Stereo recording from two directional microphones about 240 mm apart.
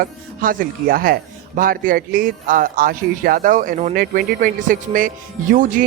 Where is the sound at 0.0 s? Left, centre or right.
Right.